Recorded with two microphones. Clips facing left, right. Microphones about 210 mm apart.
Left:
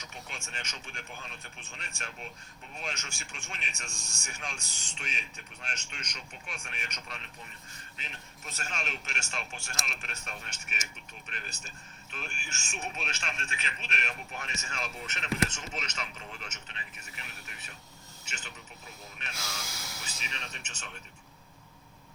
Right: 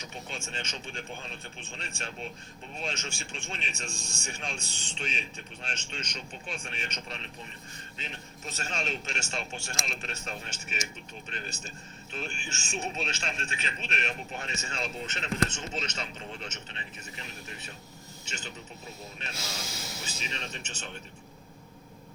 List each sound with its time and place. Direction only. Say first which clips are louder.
0.0 s a man's voice: right 5 dB; 25° right (ahead or behind)